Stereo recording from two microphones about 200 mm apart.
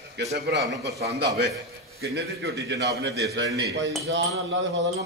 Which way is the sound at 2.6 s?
60° right (ahead or behind).